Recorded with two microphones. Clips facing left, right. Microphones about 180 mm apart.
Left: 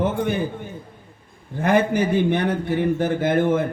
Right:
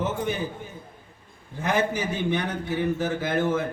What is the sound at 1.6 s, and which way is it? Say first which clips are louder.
A man's voice: left 6 dB; 60° left (ahead or behind).